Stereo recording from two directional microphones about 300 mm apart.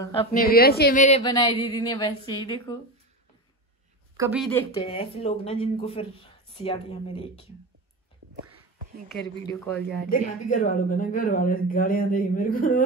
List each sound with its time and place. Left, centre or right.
0.0 s speech: centre
0.4 s speech: left; by 2.8 s centre
4.3 s speech: centre
4.8 s speech: centre
9.6 s speech: centre
10.0 s speech: left